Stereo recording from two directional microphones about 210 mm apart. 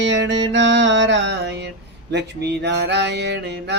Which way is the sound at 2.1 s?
50° right (ahead or behind).